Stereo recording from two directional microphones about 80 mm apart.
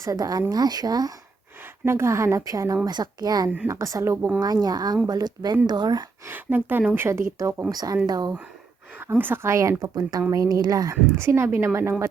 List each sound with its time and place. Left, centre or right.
0.0 s a woman's voice: right
1.8 s a woman's voice: right
2.8 s a woman's voice: right
3.7 s a woman's voice: right
6.2 s a woman's voice: right
7.7 s a woman's voice: right
9.0 s a woman's voice: right
11.1 s a woman's voice: right